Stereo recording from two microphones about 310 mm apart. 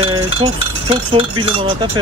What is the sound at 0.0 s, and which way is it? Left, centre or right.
Chink, centre.